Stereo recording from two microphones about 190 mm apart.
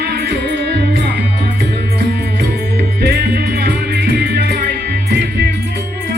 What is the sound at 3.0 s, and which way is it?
Music, 60° right (ahead or behind).